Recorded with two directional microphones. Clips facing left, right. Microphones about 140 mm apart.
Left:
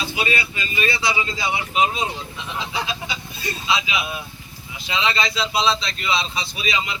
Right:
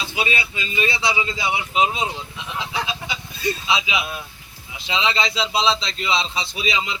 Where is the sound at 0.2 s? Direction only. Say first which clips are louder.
Right 1 dB; 20° right (ahead or behind).